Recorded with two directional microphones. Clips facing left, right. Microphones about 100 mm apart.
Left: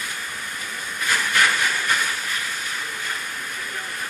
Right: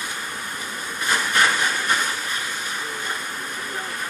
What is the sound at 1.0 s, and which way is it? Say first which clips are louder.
Hiss: right 1 dB; 25° right (ahead or behind).